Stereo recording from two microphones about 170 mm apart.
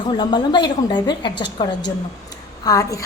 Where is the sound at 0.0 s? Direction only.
25° left (ahead or behind).